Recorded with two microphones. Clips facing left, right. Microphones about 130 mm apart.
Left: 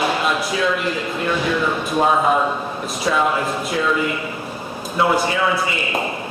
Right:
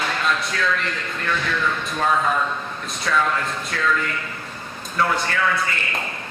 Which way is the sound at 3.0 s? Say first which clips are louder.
Left 3 dB; 15° left (ahead or behind).